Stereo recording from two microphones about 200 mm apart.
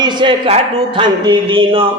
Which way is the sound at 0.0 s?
25° right (ahead or behind).